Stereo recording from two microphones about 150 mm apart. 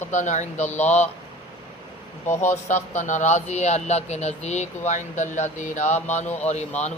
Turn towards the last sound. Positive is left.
turn(degrees=50)  # may be behind; listen again after turning